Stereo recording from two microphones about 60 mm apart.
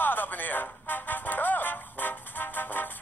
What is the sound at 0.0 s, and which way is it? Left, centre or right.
Music, left.